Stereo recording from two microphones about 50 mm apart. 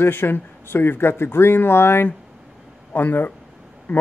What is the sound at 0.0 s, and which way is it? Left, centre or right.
Speech, left.